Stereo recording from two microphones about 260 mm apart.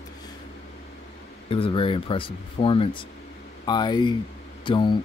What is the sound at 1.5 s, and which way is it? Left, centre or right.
Speech, left.